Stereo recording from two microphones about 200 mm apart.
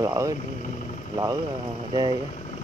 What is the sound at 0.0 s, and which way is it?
Speech, 15° right (ahead or behind).